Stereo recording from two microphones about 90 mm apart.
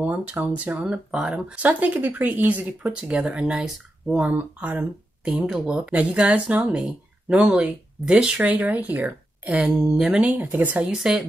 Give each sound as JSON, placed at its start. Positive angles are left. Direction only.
{"t": 0.0, "sound": "speech", "side_deg": -15}
{"t": 4.2, "sound": "speech", "side_deg": -15}
{"t": 9.8, "sound": "speech", "side_deg": -5}